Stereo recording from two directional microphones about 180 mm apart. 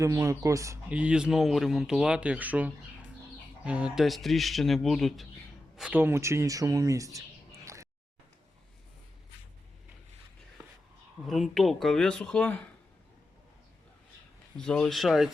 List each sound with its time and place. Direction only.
0.0 s speech: 20° right (ahead or behind)
11.3 s speech: centre (ahead or behind)
14.6 s speech: 5° left (ahead or behind)